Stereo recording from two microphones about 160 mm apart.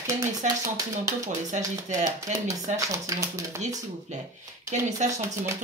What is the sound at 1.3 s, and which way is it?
Speech, 50° right (ahead or behind).